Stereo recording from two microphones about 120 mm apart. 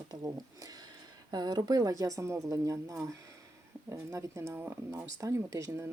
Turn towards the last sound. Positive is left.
turn(degrees=-25)  # may be behind; listen again after turning